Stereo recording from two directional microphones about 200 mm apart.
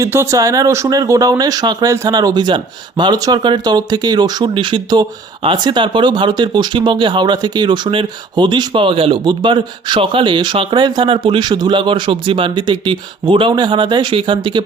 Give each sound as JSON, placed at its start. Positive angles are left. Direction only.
{"t": 0.0, "sound": "speech", "side_deg": -15}